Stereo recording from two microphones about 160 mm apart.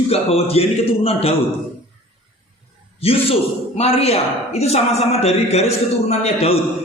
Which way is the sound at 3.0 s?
35° left (ahead or behind).